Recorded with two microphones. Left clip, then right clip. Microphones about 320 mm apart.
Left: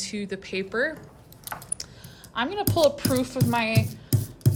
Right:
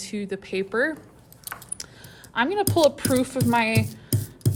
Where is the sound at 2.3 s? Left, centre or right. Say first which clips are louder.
Right 4 dB; centre.